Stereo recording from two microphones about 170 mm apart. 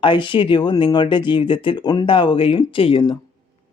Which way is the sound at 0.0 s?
30° left (ahead or behind).